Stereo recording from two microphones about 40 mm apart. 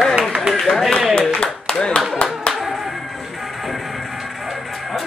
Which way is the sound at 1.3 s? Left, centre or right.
Left.